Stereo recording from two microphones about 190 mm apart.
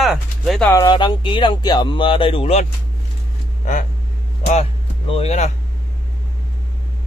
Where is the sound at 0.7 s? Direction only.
20° left (ahead or behind).